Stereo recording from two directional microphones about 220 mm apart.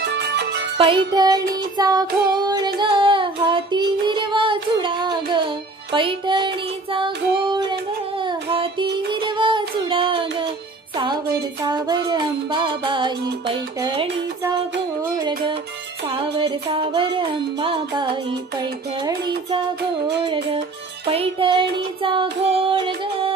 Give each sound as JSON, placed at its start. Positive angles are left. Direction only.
{"t": 0.0, "sound": "music", "side_deg": -50}
{"t": 0.7, "sound": "music", "side_deg": -20}
{"t": 1.6, "sound": "child singing", "side_deg": -20}
{"t": 5.9, "sound": "music", "side_deg": -20}
{"t": 8.2, "sound": "child singing", "side_deg": -20}
{"t": 11.6, "sound": "music", "side_deg": -20}